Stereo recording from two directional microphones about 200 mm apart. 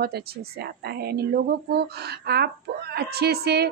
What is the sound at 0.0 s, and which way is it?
Speech, 50° right (ahead or behind).